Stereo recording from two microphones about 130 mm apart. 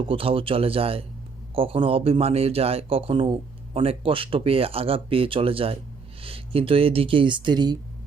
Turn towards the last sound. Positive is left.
turn(degrees=-35)  # may be behind; listen again after turning